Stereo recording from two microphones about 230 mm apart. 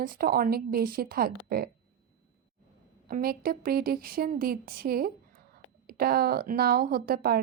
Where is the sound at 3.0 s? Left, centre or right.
Right.